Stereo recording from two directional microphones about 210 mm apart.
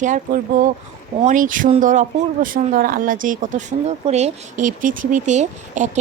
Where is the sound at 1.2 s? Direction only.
40° right (ahead or behind).